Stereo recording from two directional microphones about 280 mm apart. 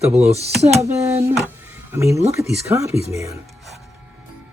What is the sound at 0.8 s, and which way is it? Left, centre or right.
Speech, centre.